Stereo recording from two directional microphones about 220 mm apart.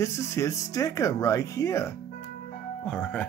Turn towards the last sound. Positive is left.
turn(degrees=5)  # may be behind; listen again after turning